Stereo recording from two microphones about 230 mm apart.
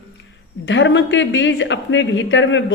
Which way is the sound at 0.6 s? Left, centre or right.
Left.